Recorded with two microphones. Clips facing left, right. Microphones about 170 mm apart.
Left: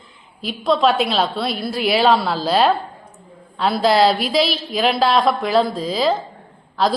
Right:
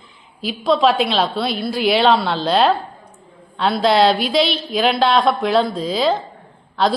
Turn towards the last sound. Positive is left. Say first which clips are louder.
# right 1 dB
turn(degrees=0)  # may be behind; listen again after turning